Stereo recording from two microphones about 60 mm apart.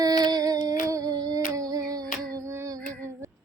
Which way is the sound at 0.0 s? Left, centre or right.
Right.